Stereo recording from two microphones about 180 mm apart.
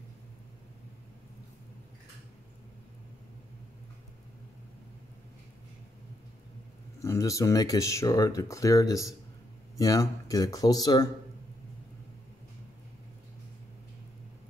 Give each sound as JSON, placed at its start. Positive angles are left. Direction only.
{"t": 7.0, "sound": "speech", "side_deg": 15}